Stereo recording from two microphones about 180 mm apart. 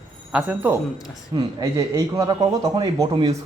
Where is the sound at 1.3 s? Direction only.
25° right (ahead or behind).